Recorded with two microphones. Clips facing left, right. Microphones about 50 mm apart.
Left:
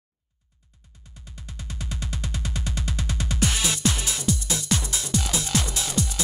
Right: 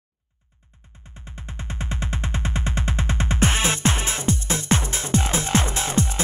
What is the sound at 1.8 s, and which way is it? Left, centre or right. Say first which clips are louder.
Music: right 4 dB; right.